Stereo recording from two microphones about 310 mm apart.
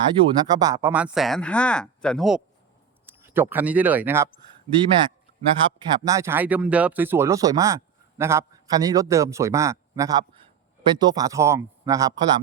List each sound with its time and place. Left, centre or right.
0.2 s a man's voice: centre